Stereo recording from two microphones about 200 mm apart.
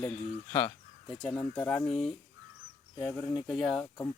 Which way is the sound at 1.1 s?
Centre (ahead or behind).